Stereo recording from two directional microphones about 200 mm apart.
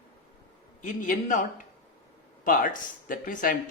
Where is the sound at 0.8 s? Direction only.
40° left (ahead or behind).